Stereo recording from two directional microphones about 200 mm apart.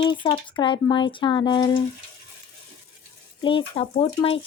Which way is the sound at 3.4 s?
25° left (ahead or behind).